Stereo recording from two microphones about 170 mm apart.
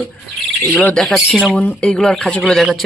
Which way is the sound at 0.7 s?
10° left (ahead or behind).